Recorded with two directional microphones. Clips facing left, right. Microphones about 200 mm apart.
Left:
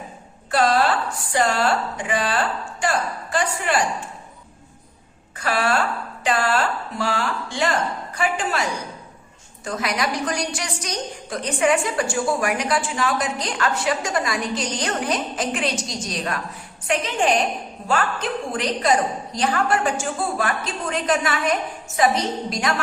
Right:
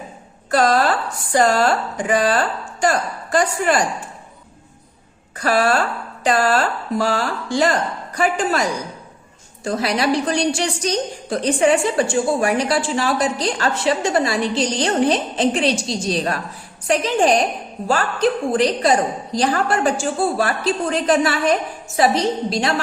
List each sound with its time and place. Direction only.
0.5 s a woman's voice: 40° right (ahead or behind)
5.4 s a woman's voice: 40° right (ahead or behind)
9.6 s a woman's voice: 30° right (ahead or behind)